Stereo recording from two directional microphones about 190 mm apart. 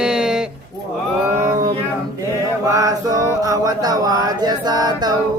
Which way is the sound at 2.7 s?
20° right (ahead or behind).